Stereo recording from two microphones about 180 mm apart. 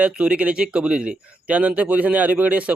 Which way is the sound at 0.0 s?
5° right (ahead or behind).